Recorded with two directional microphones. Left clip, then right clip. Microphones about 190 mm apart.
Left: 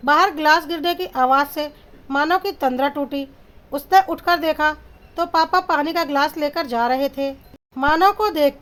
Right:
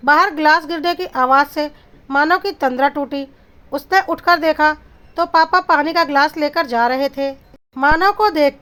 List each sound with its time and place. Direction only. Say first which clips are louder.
0.0 s speech: right 3 dB; 15° right (ahead or behind)